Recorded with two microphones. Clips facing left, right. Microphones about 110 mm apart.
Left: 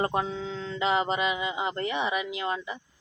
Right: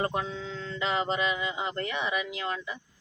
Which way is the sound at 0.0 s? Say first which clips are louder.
Left 3 dB; 30° left (ahead or behind).